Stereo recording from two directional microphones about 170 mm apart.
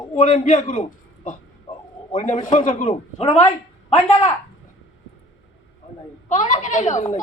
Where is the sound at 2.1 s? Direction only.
50° left (ahead or behind).